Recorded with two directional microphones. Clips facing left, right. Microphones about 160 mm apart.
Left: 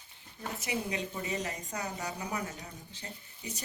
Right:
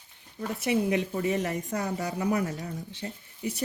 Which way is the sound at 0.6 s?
60° right (ahead or behind).